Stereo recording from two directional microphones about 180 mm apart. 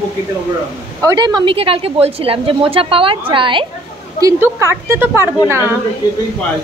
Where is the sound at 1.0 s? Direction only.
20° right (ahead or behind).